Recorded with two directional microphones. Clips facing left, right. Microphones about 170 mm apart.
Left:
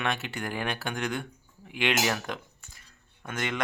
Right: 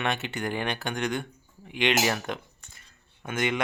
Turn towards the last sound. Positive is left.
turn(degrees=-5)  # may be behind; listen again after turning